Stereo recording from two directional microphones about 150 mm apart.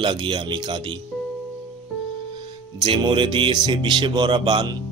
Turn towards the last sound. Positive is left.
turn(degrees=-30)  # may be behind; listen again after turning